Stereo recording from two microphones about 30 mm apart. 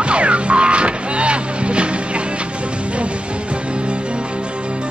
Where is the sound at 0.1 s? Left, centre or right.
Right.